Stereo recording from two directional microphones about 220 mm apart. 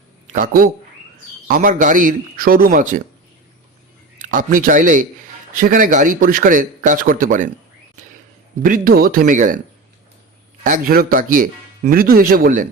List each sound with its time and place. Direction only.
0.3 s speech: 40° right (ahead or behind)
4.2 s speech: 40° right (ahead or behind)
8.6 s speech: 40° right (ahead or behind)
10.6 s speech: 40° right (ahead or behind)